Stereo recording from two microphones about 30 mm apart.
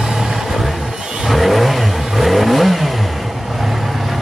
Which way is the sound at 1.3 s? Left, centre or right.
Centre.